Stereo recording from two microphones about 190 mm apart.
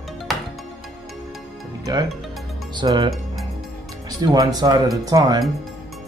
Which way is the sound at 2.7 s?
25° right (ahead or behind).